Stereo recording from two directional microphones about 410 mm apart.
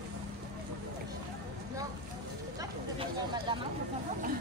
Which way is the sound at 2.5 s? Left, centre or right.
Centre.